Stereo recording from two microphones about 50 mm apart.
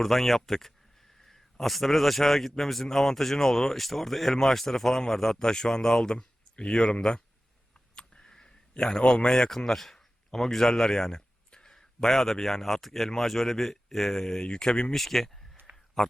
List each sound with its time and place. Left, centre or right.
0.0 s speech: centre
14.9 s speech: centre
15.7 s a sound: right